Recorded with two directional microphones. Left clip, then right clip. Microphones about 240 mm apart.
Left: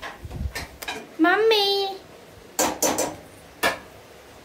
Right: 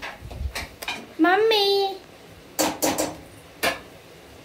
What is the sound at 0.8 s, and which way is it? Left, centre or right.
Dishes, centre.